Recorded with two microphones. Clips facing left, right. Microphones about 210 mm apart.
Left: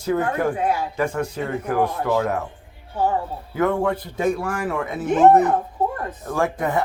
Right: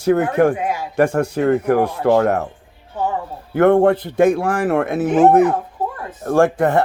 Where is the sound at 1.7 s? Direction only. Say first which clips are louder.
Right 6 dB; 60° right (ahead or behind).